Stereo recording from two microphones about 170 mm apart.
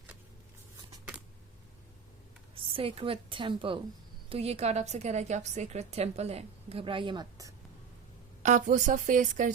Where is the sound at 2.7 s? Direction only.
30° right (ahead or behind).